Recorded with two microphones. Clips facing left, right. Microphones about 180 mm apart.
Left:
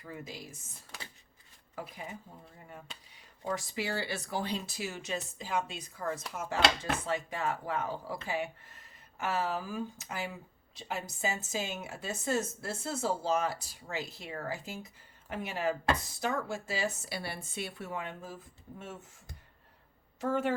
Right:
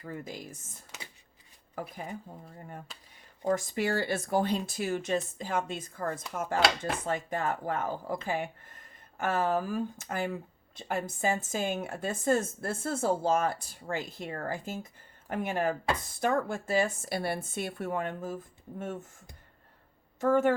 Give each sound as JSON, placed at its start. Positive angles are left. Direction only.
{"t": 0.0, "sound": "a woman's voice", "side_deg": -50}
{"t": 1.7, "sound": "a woman's voice", "side_deg": -45}
{"t": 3.4, "sound": "a woman's voice", "side_deg": -50}
{"t": 20.2, "sound": "a woman's voice", "side_deg": -50}